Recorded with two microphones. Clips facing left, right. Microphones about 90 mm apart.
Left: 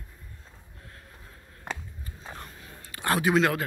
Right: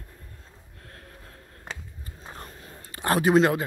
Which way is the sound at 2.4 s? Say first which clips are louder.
Right 2 dB; 30° right (ahead or behind).